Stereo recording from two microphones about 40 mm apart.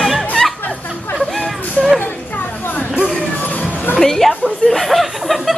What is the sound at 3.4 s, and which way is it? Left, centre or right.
Music, left.